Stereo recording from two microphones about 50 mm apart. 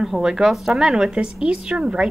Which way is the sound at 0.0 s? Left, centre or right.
Centre.